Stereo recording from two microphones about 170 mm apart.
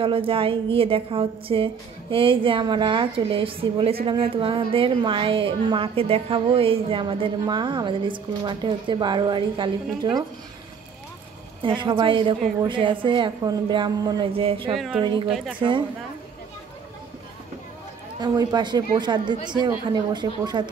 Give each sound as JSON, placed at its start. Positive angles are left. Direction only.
{"t": 0.0, "sound": "a woman's voice", "side_deg": -30}
{"t": 11.6, "sound": "a woman's voice", "side_deg": -30}
{"t": 15.2, "sound": "a woman's voice", "side_deg": 0}
{"t": 18.2, "sound": "a woman's voice", "side_deg": -25}